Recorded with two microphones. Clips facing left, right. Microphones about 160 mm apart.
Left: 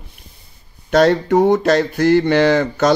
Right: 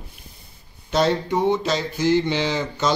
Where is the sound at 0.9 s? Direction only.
65° left (ahead or behind).